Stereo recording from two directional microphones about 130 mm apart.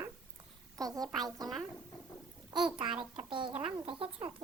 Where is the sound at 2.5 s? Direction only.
40° right (ahead or behind).